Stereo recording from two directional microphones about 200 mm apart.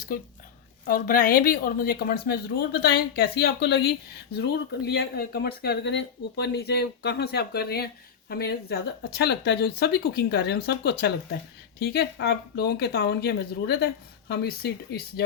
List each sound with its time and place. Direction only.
0.9 s speech: 45° left (ahead or behind)